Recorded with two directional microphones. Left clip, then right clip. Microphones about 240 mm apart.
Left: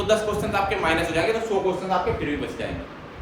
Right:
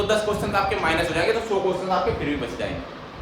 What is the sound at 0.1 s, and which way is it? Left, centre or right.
A man's voice, centre.